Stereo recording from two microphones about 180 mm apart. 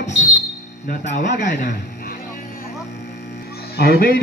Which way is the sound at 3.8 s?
55° left (ahead or behind).